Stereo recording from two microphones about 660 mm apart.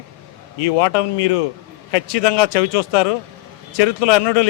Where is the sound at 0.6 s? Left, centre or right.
Left.